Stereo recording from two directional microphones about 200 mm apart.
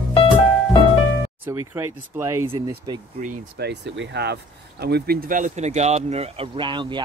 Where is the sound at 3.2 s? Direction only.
55° right (ahead or behind).